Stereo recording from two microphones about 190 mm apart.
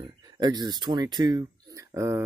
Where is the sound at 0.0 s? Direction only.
20° right (ahead or behind).